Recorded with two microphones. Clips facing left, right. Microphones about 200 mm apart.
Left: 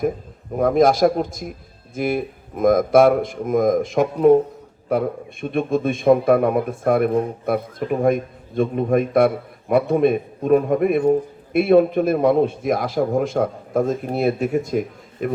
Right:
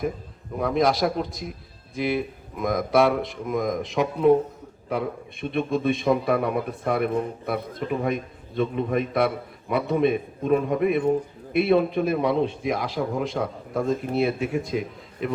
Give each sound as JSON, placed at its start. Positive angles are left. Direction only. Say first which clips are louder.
{"t": 0.5, "sound": "a man's voice", "louder": "left 6 dB", "side_deg": 50}